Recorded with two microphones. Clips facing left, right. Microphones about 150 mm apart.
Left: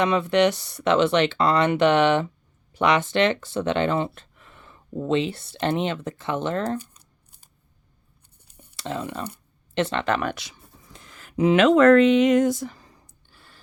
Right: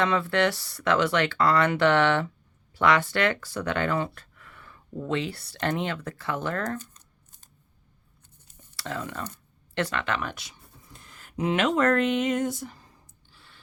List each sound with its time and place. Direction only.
0.0 s speech: 20° left (ahead or behind)
6.7 s shuffling cards: 10° left (ahead or behind)
8.5 s a sound: 15° left (ahead or behind)
9.8 s speech: 35° left (ahead or behind)
10.2 s speech: 80° left
13.3 s a sound: 45° left (ahead or behind)